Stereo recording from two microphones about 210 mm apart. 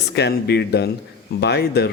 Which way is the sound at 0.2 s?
50° left (ahead or behind).